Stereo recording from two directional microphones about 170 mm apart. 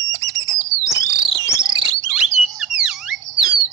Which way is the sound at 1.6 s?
25° right (ahead or behind).